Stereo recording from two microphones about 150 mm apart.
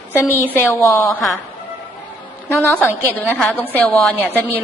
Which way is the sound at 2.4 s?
15° left (ahead or behind).